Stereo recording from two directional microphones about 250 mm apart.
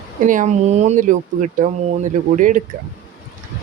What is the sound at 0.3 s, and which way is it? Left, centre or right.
Speech, right.